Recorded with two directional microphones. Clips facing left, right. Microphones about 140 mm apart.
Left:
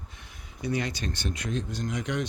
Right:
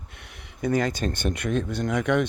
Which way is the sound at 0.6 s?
45° right (ahead or behind).